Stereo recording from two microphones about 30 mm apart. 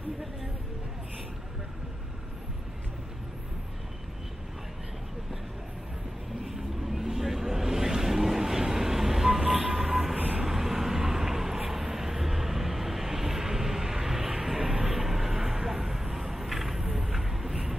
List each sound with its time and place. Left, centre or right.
6.4 s vehicle: centre
10.1 s vehicle: right
10.4 s vehicle: centre
16.9 s a sound: centre